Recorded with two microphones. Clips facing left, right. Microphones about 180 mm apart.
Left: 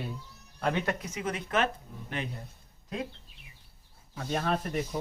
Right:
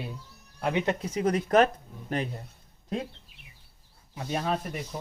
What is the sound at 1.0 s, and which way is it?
Speech, 35° right (ahead or behind).